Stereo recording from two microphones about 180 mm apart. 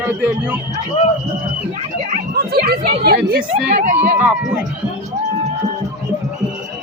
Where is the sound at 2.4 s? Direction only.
60° right (ahead or behind).